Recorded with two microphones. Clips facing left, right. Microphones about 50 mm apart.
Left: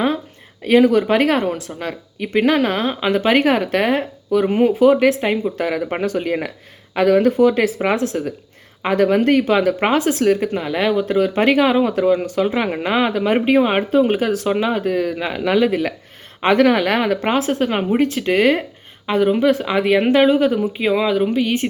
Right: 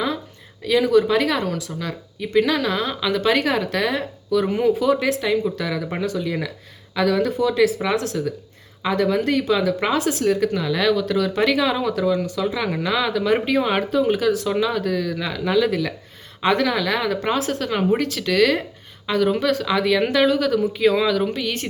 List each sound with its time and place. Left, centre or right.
0.6 s speech: left
8.8 s speech: left
10.4 s speech: left
15.4 s speech: left